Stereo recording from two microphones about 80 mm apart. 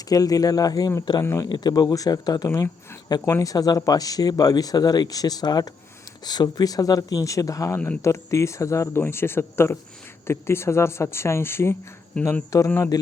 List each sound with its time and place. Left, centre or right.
0.1 s speech: left
1.2 s speech: left
1.5 s speech: left
3.2 s speech: left
12.1 s speech: centre
12.5 s speech: left
12.9 s speech: left